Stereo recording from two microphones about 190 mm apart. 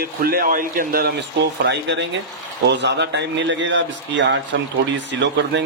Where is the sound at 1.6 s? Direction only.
70° right (ahead or behind).